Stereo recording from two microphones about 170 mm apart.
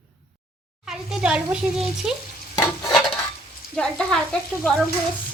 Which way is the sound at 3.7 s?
5° left (ahead or behind).